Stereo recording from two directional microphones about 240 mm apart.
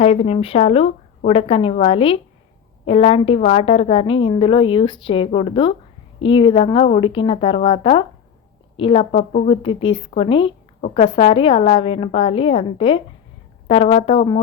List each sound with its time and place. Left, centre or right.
0.0 s a woman's voice: left